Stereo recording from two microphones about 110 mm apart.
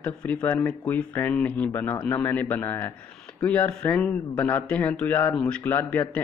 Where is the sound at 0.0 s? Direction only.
10° left (ahead or behind).